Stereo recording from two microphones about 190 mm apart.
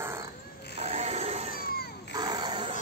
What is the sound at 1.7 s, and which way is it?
Cat, 55° left (ahead or behind).